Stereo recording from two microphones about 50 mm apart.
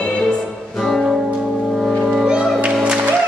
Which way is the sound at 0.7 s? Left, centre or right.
Centre.